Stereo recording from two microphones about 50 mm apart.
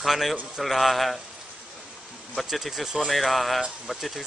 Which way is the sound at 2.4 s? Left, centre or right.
Centre.